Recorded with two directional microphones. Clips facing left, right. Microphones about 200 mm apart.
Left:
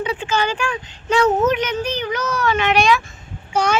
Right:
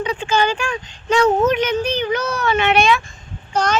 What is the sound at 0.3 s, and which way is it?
Speech, 25° right (ahead or behind).